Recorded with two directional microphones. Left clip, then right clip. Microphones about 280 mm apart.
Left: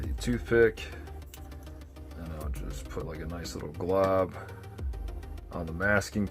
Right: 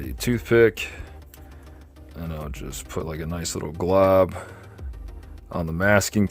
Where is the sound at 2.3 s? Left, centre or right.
Right.